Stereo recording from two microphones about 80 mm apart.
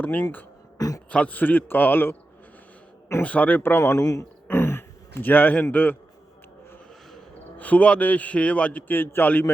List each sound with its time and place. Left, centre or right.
0.0 s a man's voice: centre
0.8 s a sound: left
1.1 s a man's voice: centre
3.2 s a man's voice: centre
3.9 s speech: left
4.4 s a sound: left
7.6 s a man's voice: centre